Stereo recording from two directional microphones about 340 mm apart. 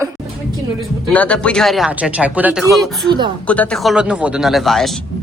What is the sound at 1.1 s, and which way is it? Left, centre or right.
A woman's voice, centre.